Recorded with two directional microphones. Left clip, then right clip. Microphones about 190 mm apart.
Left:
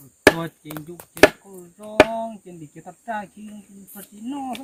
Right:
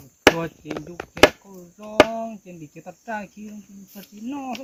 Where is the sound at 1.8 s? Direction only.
25° right (ahead or behind).